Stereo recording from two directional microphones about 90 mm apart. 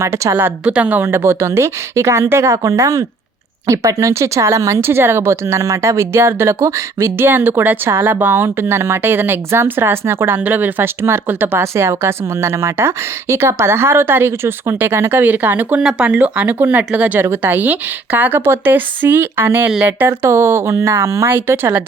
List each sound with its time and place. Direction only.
0.0 s speech: 30° right (ahead or behind)
0.6 s speech: 15° right (ahead or behind)